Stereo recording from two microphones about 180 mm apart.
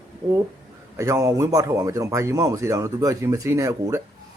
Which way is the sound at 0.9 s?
20° right (ahead or behind).